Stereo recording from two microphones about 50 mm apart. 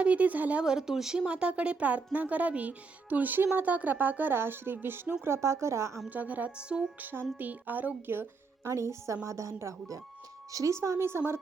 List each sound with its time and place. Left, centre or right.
0.0 s speech: right
0.6 s speech: centre; by 5.1 s right
5.2 s speech: right
6.1 s speech: right
6.6 s speech: centre
7.0 s speech: right
8.6 s a woman's voice: right